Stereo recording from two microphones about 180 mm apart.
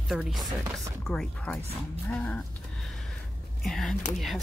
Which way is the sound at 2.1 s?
5° left (ahead or behind).